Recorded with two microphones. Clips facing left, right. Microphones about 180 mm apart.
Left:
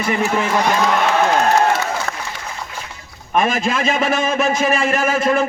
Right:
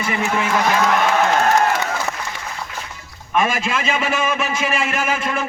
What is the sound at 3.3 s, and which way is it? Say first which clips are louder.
A man's voice: left 2 dB; 40° left (ahead or behind).